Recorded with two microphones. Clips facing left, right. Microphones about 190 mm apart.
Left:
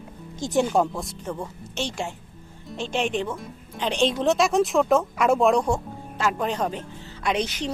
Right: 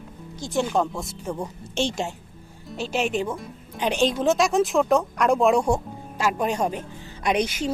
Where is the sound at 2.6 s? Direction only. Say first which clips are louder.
Right 1 dB; 5° right (ahead or behind).